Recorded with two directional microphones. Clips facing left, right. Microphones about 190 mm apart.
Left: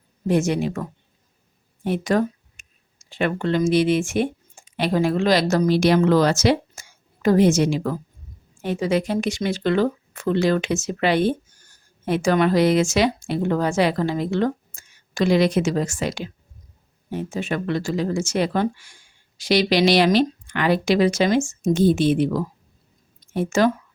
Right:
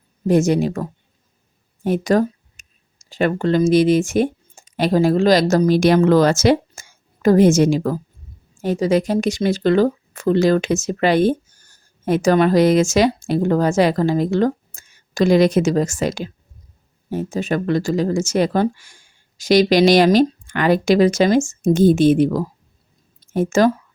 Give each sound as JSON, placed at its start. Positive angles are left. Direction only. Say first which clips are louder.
{"t": 0.3, "sound": "speech", "louder": "right 5 dB", "side_deg": -40}
{"t": 1.8, "sound": "a sound", "louder": "right 4 dB", "side_deg": -40}
{"t": 3.7, "sound": "speech", "louder": "right 4 dB", "side_deg": -40}